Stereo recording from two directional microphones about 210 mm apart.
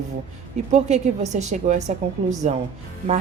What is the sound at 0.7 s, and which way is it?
Speech, 35° right (ahead or behind).